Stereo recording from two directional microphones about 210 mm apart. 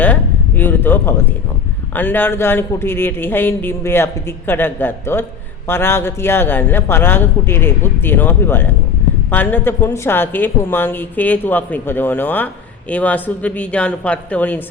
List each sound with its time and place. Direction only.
0.0 s a man's voice: 10° left (ahead or behind)